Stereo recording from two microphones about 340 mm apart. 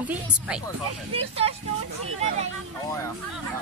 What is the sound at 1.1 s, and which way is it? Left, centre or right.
Speech, centre.